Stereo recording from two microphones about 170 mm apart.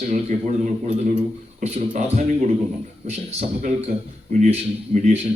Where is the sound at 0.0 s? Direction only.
40° right (ahead or behind).